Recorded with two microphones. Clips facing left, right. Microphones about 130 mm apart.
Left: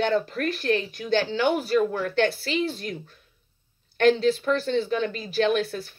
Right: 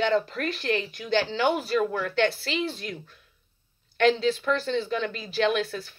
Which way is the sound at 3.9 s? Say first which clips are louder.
Left 2 dB; 40° left (ahead or behind).